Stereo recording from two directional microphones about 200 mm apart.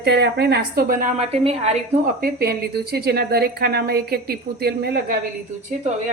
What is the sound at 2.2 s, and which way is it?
A woman's voice, 50° right (ahead or behind).